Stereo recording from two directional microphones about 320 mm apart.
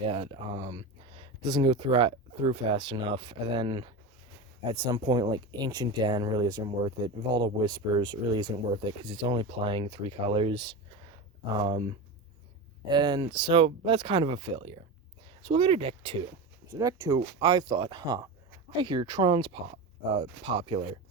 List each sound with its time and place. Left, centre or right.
0.0 s speech: centre